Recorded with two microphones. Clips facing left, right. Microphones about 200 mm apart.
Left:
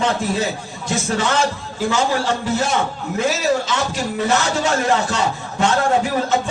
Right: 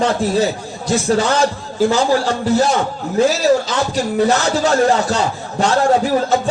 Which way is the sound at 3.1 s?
35° right (ahead or behind).